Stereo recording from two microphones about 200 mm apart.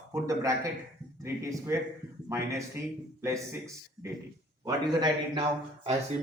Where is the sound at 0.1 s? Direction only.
15° right (ahead or behind).